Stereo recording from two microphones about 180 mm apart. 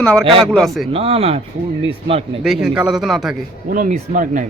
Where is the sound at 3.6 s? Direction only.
55° right (ahead or behind).